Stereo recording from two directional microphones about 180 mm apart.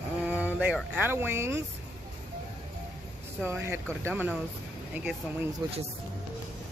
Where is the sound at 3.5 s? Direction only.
15° right (ahead or behind).